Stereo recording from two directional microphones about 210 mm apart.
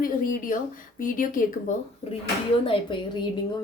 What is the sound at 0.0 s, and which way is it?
Speech, 40° left (ahead or behind).